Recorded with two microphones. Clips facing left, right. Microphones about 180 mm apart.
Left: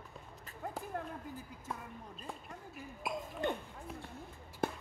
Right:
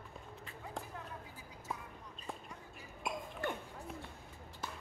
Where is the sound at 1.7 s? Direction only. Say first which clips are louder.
Even; centre (ahead or behind).